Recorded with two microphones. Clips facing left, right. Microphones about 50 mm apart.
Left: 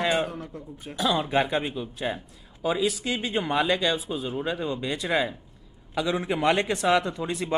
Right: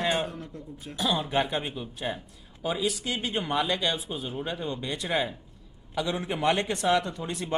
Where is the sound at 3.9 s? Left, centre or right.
Left.